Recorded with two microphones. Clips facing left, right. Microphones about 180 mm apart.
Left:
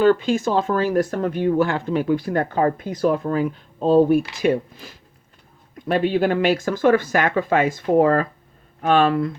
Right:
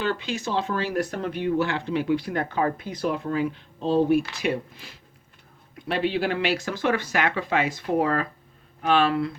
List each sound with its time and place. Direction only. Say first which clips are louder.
0.0 s speech: left 11 dB; 45° left (ahead or behind)